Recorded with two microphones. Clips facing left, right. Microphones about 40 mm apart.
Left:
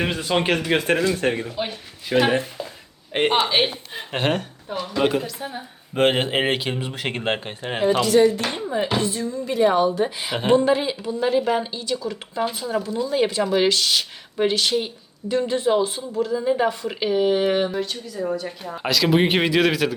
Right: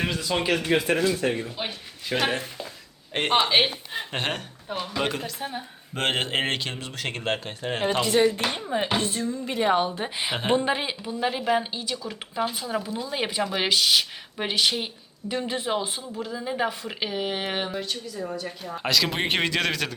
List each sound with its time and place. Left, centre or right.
0.0 s speech: left
1.5 s a man's voice: centre
3.4 s a man's voice: centre
5.4 s speech: right
5.9 s a man's voice: centre
7.8 s speech: centre
8.0 s speech: right
10.3 s speech: centre
10.7 s speech: centre